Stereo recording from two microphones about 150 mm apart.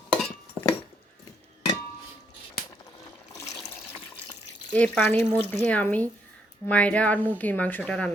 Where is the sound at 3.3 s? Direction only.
20° left (ahead or behind).